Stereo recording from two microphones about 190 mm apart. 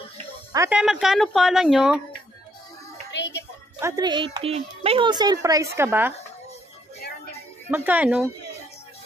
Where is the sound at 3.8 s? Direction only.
20° right (ahead or behind).